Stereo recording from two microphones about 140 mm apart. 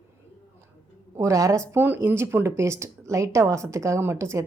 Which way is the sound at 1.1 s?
25° right (ahead or behind).